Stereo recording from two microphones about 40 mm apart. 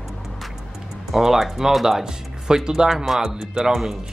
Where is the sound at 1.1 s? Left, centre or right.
Centre.